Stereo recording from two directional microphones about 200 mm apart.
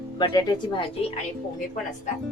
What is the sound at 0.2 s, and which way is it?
Speech, 20° left (ahead or behind).